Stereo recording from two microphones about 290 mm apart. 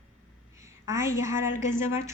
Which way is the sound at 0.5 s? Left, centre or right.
Centre.